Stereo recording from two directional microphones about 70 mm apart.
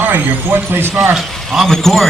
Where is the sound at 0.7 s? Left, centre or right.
Right.